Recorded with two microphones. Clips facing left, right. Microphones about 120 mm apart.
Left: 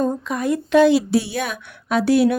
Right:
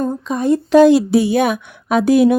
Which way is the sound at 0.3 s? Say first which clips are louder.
Right 5 dB; 25° right (ahead or behind).